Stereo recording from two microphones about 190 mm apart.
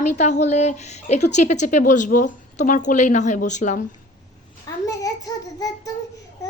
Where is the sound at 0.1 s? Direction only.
40° left (ahead or behind).